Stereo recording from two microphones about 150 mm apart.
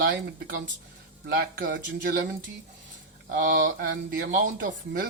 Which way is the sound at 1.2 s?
90° right.